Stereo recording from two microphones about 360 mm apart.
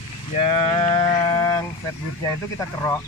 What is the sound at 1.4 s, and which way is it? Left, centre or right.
Vehicle, centre.